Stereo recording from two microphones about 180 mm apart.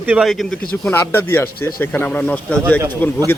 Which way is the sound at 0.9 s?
10° left (ahead or behind).